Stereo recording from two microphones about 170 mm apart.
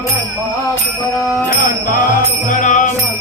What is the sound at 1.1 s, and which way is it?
Music, 15° left (ahead or behind).